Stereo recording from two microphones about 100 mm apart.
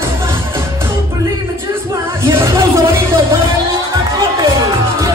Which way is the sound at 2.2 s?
30° right (ahead or behind).